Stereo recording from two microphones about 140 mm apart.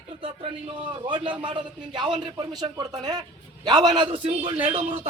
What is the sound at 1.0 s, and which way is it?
A man's voice, 35° right (ahead or behind).